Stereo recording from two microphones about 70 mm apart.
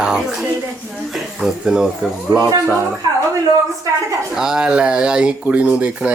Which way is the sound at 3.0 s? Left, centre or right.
Right.